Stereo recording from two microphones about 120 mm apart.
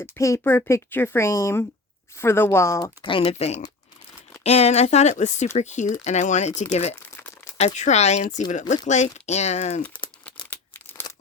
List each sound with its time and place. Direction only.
0.2 s a woman's voice: 25° left (ahead or behind)
3.0 s speech: 45° left (ahead or behind)
3.2 s speech: 60° left (ahead or behind)
7.0 s crumpling: 20° left (ahead or behind)
7.6 s speech: 70° left (ahead or behind); by 8.8 s 90° left
8.9 s speech: 75° left (ahead or behind)
10.0 s crumpling: 45° left (ahead or behind)
11.1 s tearing: 35° left (ahead or behind)